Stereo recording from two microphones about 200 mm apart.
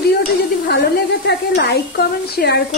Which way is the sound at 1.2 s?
55° left (ahead or behind).